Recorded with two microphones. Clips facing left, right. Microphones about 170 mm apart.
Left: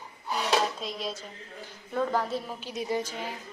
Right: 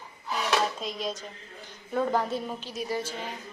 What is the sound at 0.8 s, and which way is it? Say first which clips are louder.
Speech: right 2 dB; centre (ahead or behind).